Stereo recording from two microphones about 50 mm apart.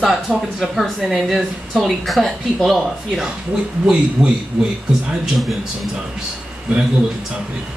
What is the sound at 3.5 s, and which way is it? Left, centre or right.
Speech, centre.